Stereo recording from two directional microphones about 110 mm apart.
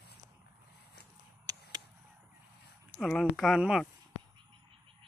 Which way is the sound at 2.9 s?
5° left (ahead or behind).